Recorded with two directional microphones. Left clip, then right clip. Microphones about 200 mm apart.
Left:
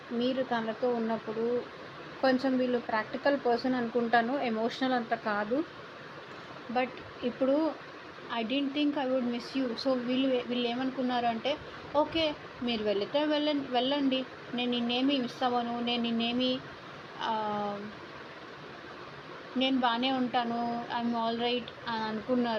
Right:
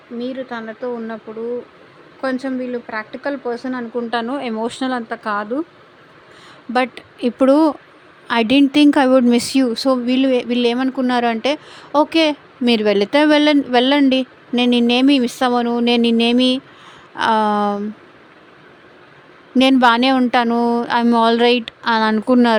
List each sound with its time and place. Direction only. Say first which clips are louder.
0.2 s speech: right 4 dB; 25° right (ahead or behind)
2.2 s speech: right 5 dB; 25° right (ahead or behind)
6.7 s a woman's voice: right 13 dB; 60° right (ahead or behind)
19.5 s a woman's voice: right 16 dB; 75° right (ahead or behind)